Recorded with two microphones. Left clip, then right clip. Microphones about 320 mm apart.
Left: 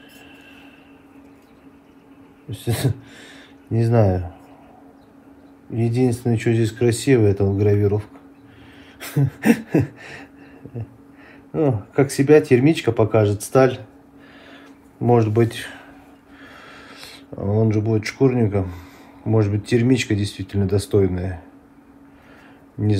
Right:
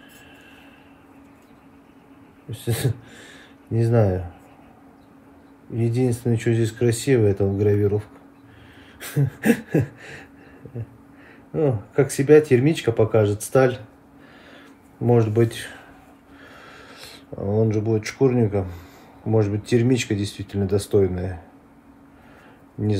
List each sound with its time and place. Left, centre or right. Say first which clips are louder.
2.5 s speech: left 2 dB; centre
5.8 s speech: left 2 dB; centre
9.0 s a sound: left 2 dB; centre
11.5 s speech: left 1 dB; centre
15.0 s speech: left 2 dB; centre
16.4 s a sound: left 2 dB; centre
17.6 s a man's voice: left 1 dB; centre